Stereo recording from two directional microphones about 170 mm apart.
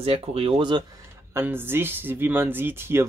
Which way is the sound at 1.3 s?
15° right (ahead or behind).